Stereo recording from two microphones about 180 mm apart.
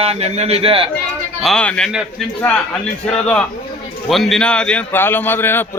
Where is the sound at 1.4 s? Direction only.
5° left (ahead or behind).